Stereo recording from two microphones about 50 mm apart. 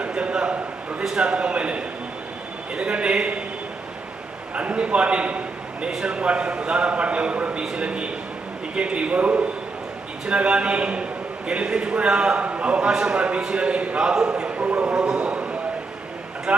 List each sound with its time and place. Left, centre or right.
0.0 s a sound: right
1.1 s a man's voice: right
4.5 s a man's voice: right
16.5 s a man's voice: centre